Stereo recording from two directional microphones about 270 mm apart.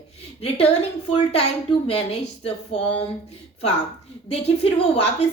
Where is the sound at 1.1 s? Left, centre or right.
Left.